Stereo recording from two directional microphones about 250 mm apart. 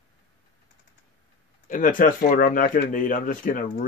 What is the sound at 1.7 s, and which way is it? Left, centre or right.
Speech, left.